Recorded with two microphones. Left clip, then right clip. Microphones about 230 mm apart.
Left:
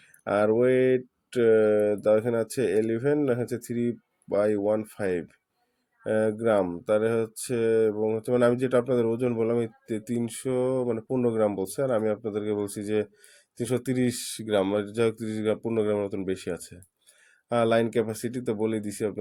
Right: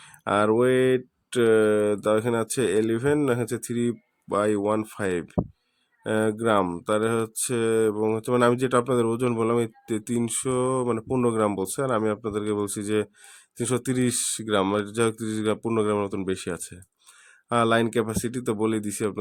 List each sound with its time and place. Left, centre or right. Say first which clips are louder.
0.0 s speech: right 1 dB; right